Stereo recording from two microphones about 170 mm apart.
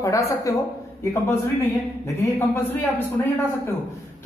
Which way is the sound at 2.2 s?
15° left (ahead or behind).